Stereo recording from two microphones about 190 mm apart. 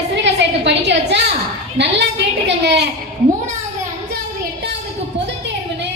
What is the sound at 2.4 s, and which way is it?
Speech, 65° right (ahead or behind).